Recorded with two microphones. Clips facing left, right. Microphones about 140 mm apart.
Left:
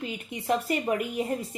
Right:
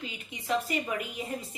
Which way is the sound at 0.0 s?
50° left (ahead or behind).